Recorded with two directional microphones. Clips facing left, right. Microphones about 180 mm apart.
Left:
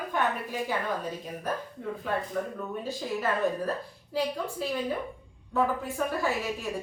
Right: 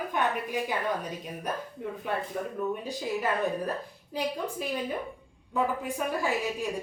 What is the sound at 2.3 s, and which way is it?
A woman's voice, 20° right (ahead or behind).